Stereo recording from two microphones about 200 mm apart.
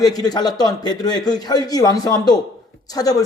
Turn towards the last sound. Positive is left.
turn(degrees=20)  # may be behind; listen again after turning